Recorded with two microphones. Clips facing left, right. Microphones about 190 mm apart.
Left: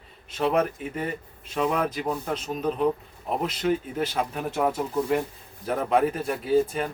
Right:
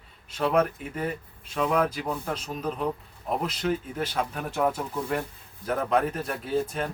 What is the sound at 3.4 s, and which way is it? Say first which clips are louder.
A man's voice: left 5 dB; centre (ahead or behind).